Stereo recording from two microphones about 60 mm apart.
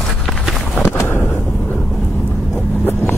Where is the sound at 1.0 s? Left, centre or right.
Left.